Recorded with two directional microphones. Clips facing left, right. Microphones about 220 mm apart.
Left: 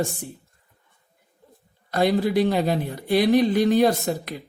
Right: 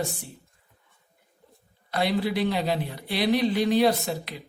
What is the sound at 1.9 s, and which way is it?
Speech, 45° left (ahead or behind).